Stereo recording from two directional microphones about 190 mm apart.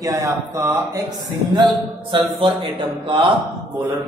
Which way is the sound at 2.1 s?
25° right (ahead or behind).